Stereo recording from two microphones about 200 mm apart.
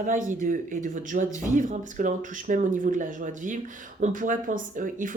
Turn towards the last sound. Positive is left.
turn(degrees=-40)  # may be behind; listen again after turning